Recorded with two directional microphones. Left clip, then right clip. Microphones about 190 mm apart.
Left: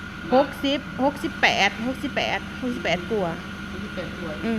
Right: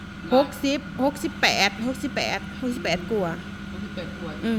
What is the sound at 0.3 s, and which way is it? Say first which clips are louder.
A woman's voice: even; 25° right (ahead or behind).